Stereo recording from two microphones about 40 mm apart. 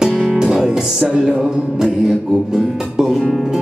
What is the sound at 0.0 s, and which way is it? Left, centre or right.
Music, centre.